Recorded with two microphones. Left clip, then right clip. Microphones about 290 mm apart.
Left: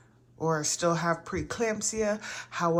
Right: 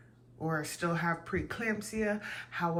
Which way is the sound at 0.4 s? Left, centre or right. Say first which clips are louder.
Left 7 dB; centre.